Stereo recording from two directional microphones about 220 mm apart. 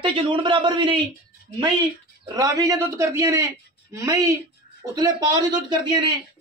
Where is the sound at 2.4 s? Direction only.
15° right (ahead or behind).